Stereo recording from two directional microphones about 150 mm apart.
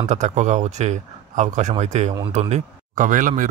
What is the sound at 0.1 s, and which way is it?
Speech, 50° right (ahead or behind).